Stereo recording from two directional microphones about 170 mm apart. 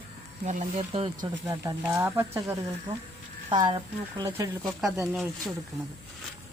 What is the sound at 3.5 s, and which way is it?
A woman's voice, 25° right (ahead or behind).